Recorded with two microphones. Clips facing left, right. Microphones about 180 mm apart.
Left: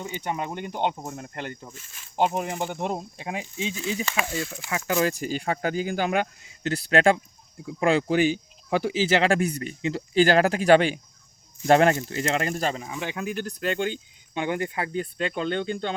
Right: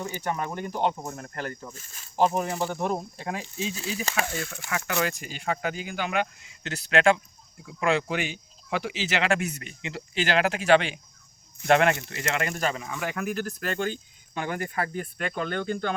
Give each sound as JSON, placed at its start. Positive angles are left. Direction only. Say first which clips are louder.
{"t": 0.1, "sound": "speech", "louder": "even", "side_deg": 20}
{"t": 1.7, "sound": "speech", "louder": "left 1 dB", "side_deg": -40}
{"t": 2.1, "sound": "speech", "louder": "right 1 dB", "side_deg": 20}
{"t": 4.9, "sound": "speech", "louder": "left 7 dB", "side_deg": 35}